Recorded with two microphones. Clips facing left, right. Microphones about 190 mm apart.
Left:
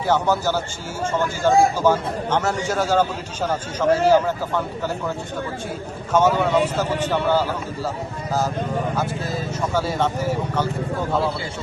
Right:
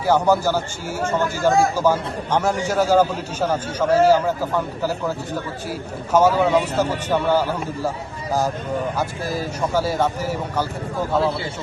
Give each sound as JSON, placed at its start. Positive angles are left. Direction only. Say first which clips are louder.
{"t": 0.1, "sound": "a man's voice", "louder": "right 3 dB", "side_deg": -10}
{"t": 6.1, "sound": "a man's voice", "louder": "right 1 dB", "side_deg": -10}